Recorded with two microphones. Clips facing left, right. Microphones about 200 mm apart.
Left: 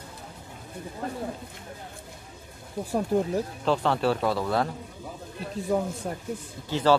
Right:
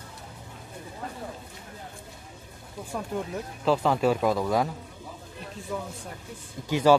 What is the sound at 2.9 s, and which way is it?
Speech, 35° left (ahead or behind).